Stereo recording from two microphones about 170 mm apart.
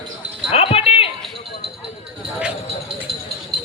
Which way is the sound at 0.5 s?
35° left (ahead or behind).